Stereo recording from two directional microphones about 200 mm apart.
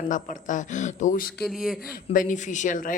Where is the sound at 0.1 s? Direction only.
40° left (ahead or behind).